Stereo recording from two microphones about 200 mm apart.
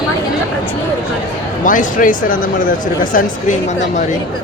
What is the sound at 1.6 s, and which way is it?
Speech, 40° left (ahead or behind).